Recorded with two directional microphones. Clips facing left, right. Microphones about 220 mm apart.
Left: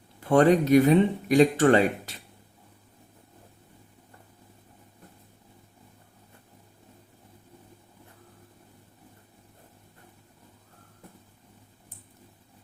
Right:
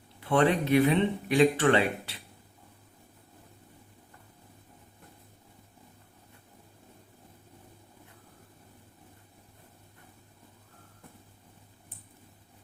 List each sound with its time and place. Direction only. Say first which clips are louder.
0.2 s speech: left 5 dB; 45° left (ahead or behind)